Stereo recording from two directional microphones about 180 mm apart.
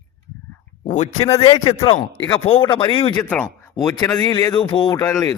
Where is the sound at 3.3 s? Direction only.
5° left (ahead or behind).